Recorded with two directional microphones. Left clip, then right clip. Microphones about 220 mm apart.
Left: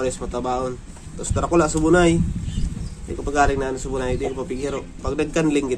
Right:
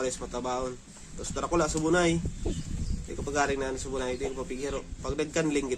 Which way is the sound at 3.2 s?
Centre (ahead or behind).